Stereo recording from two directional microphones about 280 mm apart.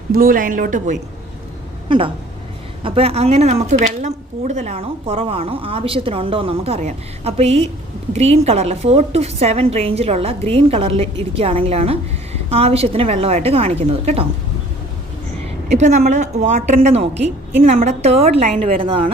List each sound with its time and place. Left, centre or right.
0.1 s a woman's voice: right
15.7 s a woman's voice: right